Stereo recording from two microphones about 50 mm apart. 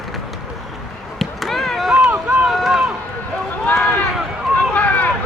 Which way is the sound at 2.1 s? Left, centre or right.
Right.